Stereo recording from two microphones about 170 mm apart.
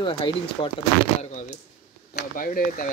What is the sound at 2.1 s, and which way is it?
Speech, 55° left (ahead or behind).